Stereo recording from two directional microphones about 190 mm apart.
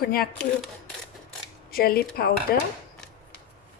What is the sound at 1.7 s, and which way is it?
Speech, 50° left (ahead or behind).